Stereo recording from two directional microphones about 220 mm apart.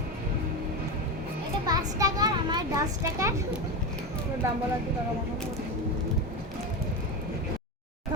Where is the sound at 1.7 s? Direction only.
15° right (ahead or behind).